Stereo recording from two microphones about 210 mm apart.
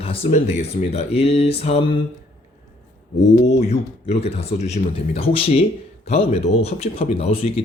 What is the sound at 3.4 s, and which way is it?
Speech, 30° left (ahead or behind).